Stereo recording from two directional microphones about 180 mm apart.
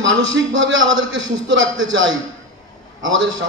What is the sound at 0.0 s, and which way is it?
A man's voice, 90° right.